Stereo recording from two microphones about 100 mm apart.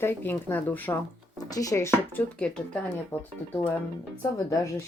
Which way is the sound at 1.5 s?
35° left (ahead or behind).